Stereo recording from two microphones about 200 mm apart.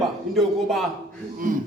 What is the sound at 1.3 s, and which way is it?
Speech, 40° right (ahead or behind).